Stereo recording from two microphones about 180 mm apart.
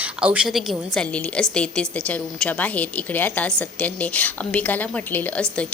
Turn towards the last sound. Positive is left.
turn(degrees=10)  # may be behind; listen again after turning